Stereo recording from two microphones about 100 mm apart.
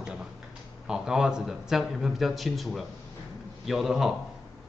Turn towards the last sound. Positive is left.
turn(degrees=-5)  # may be behind; listen again after turning